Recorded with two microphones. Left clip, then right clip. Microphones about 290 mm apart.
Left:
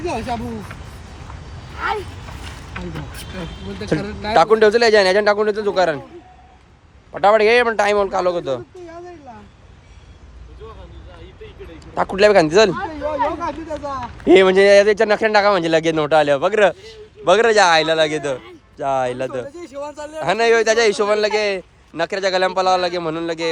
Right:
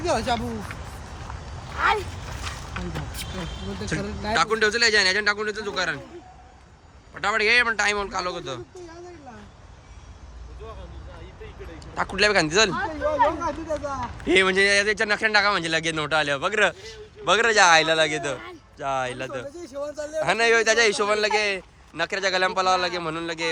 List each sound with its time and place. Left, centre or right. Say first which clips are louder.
0.0 s speech: even; centre
3.8 s speech: left 7 dB; centre
7.1 s speech: left 8 dB; centre
11.9 s a man's voice: left 8 dB; centre
19.5 s a man's voice: left 2 dB; centre
20.2 s speech: left 5 dB; centre